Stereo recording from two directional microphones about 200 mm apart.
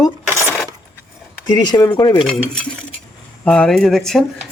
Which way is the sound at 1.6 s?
20° left (ahead or behind).